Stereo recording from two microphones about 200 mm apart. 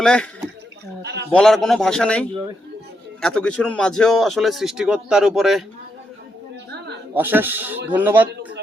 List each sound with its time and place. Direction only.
0.0 s a man's voice: 5° left (ahead or behind)
1.0 s a man's voice: 60° right (ahead or behind)
1.3 s a man's voice: centre (ahead or behind)
7.1 s speech: 10° right (ahead or behind)